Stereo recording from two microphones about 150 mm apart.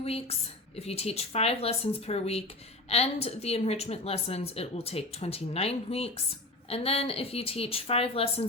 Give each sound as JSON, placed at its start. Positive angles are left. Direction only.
{"t": 0.0, "sound": "a woman's voice", "side_deg": 40}